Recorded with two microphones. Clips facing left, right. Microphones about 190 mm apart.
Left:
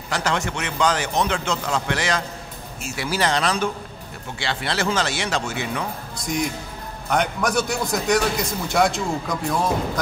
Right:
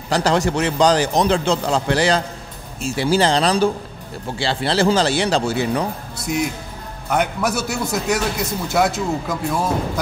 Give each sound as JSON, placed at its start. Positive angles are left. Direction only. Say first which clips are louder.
{"t": 0.1, "sound": "a man's voice", "louder": "right 7 dB", "side_deg": -35}
{"t": 6.1, "sound": "a man's voice", "louder": "right 2 dB", "side_deg": -5}